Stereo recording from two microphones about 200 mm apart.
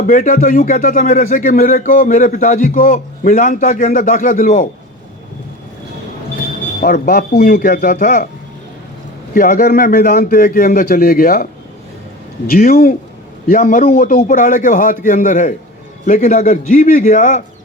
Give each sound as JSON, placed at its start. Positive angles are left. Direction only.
{"t": 0.1, "sound": "a man's voice", "side_deg": 40}
{"t": 6.8, "sound": "a man's voice", "side_deg": 50}
{"t": 9.3, "sound": "a man's voice", "side_deg": 45}
{"t": 12.5, "sound": "a man's voice", "side_deg": 45}